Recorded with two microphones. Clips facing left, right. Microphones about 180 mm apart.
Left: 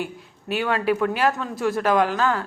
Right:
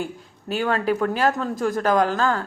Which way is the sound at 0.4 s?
35° right (ahead or behind).